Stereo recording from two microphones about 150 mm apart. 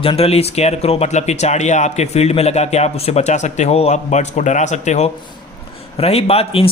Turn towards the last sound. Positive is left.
turn(degrees=40)  # may be behind; listen again after turning